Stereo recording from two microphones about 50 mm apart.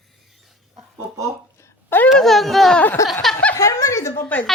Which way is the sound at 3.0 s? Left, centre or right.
Left.